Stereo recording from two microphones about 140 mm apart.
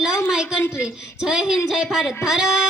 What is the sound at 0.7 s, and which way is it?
Speech, 5° right (ahead or behind).